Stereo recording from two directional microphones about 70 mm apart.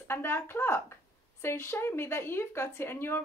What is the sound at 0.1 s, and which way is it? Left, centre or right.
A woman's voice, left.